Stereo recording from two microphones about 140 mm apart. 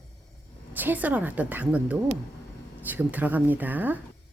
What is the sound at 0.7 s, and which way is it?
A woman's voice, 15° right (ahead or behind).